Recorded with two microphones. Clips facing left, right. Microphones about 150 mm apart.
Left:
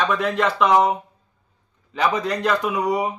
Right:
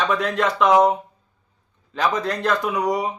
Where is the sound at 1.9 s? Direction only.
5° left (ahead or behind).